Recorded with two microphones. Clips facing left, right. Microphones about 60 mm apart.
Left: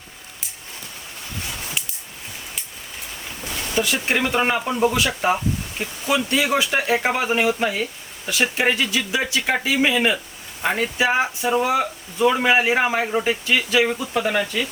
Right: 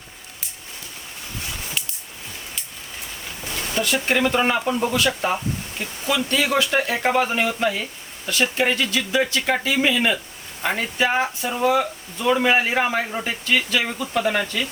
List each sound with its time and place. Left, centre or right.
3.8 s speech: centre